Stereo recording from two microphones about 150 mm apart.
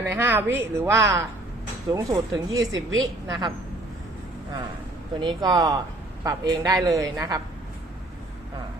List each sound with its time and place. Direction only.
0.0 s a woman's voice: 15° right (ahead or behind)
5.2 s speech: 30° right (ahead or behind)